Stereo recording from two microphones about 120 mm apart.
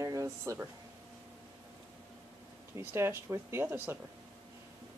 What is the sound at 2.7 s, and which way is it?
Speech, 20° right (ahead or behind).